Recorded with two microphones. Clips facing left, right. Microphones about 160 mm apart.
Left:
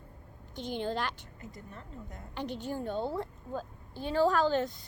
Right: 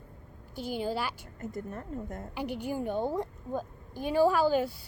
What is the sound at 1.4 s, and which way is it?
Speech, 50° right (ahead or behind).